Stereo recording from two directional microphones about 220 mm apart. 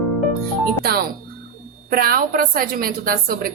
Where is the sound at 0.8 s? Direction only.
45° right (ahead or behind).